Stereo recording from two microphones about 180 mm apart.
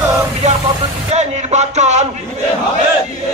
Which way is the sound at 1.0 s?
40° right (ahead or behind).